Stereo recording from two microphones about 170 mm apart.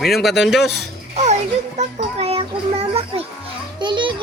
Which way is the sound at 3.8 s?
30° right (ahead or behind).